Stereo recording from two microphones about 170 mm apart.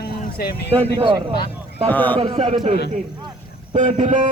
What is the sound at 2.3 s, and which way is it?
Speech, 40° right (ahead or behind).